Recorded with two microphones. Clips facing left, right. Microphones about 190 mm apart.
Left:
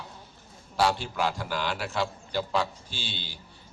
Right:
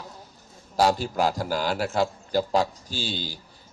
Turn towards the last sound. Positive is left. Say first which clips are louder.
# right 8 dB
turn(degrees=-40)  # may be behind; listen again after turning